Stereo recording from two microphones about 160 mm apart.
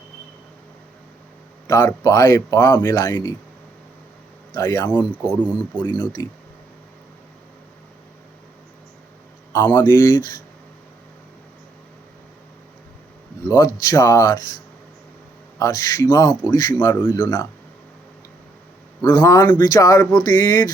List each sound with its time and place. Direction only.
1.6 s speech: 15° left (ahead or behind)
4.5 s speech: 15° left (ahead or behind)
5.2 s speech: 10° right (ahead or behind)
9.5 s speech: 15° left (ahead or behind)
13.4 s speech: 20° left (ahead or behind)
19.0 s speech: 15° left (ahead or behind)